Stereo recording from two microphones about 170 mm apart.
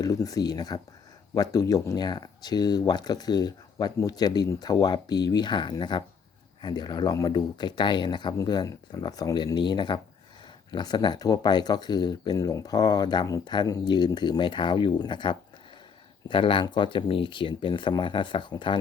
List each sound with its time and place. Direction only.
0.0 s speech: 20° left (ahead or behind)